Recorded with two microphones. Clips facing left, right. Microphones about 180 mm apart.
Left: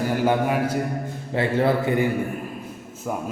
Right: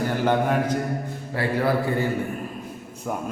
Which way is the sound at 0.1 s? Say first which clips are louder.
Left 1 dB; 10° left (ahead or behind).